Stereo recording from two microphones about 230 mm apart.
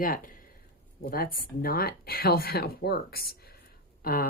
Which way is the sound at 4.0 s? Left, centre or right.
Left.